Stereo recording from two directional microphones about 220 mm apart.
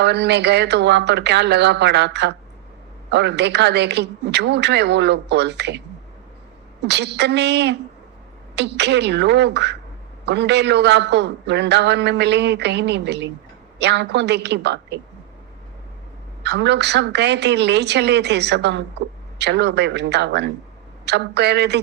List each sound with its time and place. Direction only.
0.0 s a woman's voice: 50° right (ahead or behind)
6.8 s a woman's voice: 50° right (ahead or behind)
16.4 s a woman's voice: 50° right (ahead or behind)